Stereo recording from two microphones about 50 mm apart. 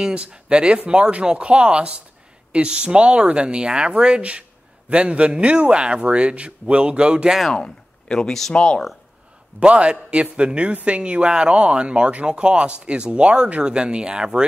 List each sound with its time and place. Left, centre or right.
0.0 s speech: right
7.4 s speech: centre
8.5 s speech: centre
9.6 s speech: right